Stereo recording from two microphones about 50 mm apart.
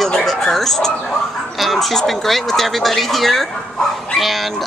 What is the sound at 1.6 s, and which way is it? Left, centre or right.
Speech, centre.